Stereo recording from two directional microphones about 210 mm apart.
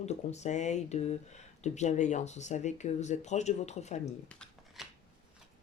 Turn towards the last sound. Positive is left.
turn(degrees=0)  # may be behind; listen again after turning